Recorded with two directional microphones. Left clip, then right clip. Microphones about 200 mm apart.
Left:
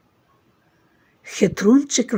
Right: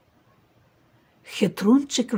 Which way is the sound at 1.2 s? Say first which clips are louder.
Left 6 dB; 15° left (ahead or behind).